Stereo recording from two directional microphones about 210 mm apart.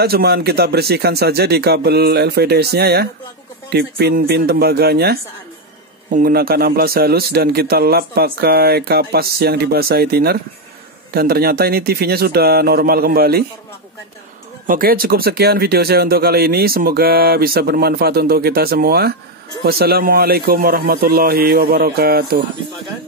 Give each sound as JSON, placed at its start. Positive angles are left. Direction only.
{"t": 0.0, "sound": "speech", "side_deg": -50}
{"t": 14.7, "sound": "speech", "side_deg": -45}